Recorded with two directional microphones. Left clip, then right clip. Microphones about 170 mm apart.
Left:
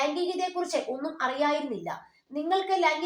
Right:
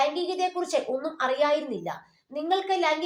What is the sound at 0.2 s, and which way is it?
A woman's voice, 30° right (ahead or behind).